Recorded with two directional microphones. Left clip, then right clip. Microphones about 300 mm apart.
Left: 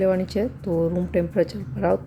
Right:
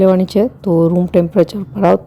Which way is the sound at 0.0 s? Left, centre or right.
Right.